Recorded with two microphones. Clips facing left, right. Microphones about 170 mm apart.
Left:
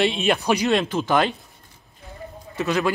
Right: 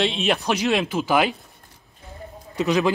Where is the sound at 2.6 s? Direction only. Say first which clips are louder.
Right 2 dB; 15° right (ahead or behind).